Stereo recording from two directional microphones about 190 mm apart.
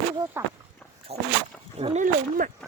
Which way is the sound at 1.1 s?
35° right (ahead or behind).